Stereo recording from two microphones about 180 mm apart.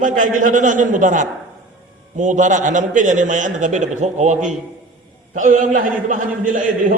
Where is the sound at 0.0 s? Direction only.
45° right (ahead or behind).